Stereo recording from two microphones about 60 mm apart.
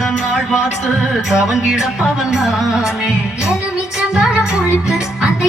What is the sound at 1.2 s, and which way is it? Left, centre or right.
Music, centre.